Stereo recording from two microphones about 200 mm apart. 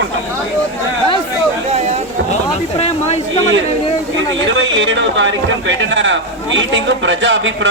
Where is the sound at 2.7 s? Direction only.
30° left (ahead or behind).